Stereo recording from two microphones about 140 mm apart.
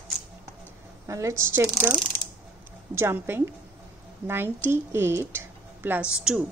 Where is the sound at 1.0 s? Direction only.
20° right (ahead or behind).